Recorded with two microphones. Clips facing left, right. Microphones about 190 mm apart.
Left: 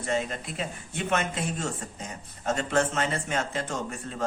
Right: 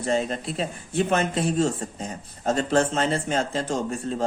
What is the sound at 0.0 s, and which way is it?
Speech, 35° right (ahead or behind).